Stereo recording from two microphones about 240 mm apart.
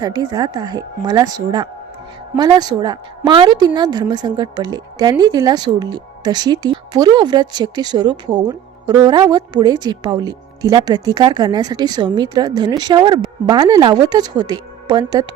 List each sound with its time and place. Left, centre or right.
0.0 s a woman's voice: centre